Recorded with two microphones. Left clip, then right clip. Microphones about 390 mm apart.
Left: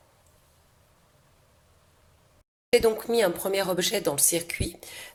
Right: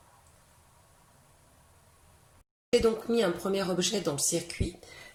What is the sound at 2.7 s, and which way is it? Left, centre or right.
Speech, centre.